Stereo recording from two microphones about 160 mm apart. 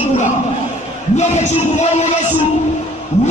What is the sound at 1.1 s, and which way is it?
Music, 45° left (ahead or behind).